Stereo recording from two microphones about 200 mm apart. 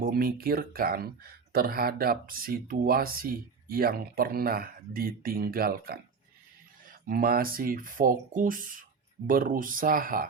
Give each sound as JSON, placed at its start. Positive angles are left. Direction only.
{"t": 0.0, "sound": "speech", "side_deg": -45}